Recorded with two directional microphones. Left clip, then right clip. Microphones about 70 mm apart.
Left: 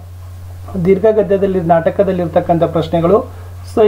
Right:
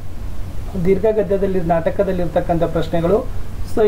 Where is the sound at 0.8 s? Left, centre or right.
Centre.